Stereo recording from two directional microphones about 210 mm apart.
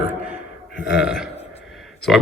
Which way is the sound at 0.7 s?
Centre (ahead or behind).